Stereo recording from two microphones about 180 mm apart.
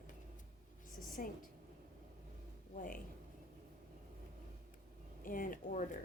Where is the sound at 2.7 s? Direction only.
50° left (ahead or behind).